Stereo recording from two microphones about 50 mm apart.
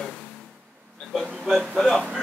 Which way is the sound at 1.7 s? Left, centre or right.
Centre.